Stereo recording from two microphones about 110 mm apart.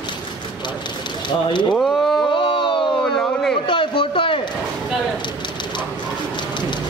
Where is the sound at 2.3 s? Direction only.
50° left (ahead or behind).